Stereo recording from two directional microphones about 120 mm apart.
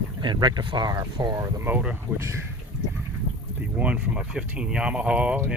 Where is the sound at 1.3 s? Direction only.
25° right (ahead or behind).